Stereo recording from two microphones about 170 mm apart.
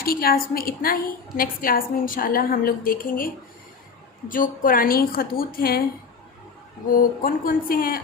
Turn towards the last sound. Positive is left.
turn(degrees=60)  # may be behind; listen again after turning